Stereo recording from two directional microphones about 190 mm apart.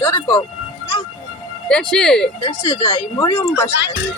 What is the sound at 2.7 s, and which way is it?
Speech, 30° left (ahead or behind).